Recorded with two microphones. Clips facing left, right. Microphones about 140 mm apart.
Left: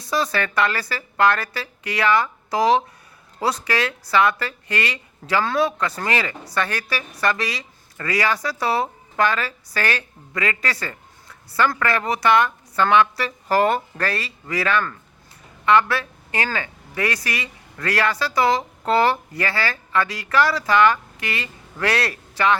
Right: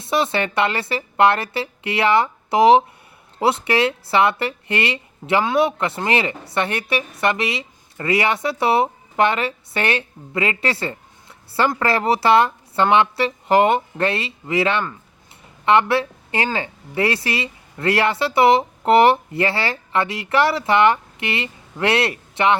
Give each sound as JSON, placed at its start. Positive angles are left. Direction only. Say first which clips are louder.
{"t": 0.0, "sound": "speech", "louder": "right 3 dB", "side_deg": -25}